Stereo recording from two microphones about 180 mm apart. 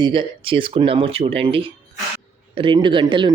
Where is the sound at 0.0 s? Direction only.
30° right (ahead or behind).